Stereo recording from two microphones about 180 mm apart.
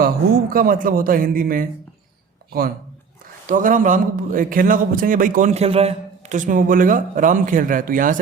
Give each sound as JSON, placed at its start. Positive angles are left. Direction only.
{"t": 0.5, "sound": "a man's voice", "side_deg": -50}